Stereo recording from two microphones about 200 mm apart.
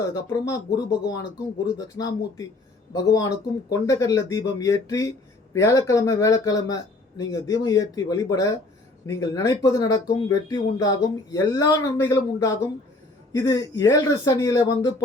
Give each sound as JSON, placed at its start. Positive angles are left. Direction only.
{"t": 0.1, "sound": "speech", "side_deg": 20}